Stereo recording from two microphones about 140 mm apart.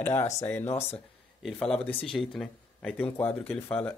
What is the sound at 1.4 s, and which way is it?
Speech, centre (ahead or behind).